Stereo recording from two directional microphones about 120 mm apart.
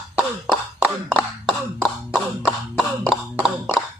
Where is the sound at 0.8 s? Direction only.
5° right (ahead or behind).